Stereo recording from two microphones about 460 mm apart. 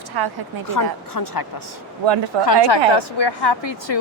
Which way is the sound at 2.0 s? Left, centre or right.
Right.